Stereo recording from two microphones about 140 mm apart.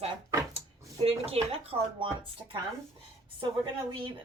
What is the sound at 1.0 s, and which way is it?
Speech, 45° right (ahead or behind).